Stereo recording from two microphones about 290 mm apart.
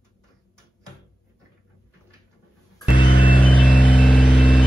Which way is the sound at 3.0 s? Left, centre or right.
Centre.